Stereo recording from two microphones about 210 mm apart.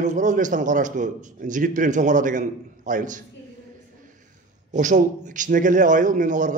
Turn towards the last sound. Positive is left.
turn(degrees=-35)  # may be behind; listen again after turning